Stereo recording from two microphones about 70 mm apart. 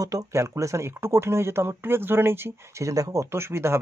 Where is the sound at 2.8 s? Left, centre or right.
Right.